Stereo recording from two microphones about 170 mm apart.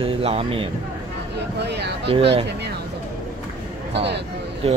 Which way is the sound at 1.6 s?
80° right.